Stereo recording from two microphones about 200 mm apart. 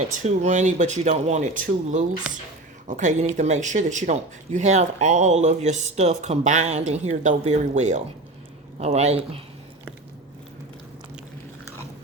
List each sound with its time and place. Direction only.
0.1 s speech: 40° right (ahead or behind)